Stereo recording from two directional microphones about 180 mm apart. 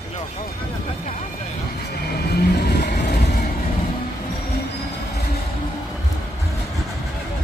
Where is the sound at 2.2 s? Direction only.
60° left (ahead or behind).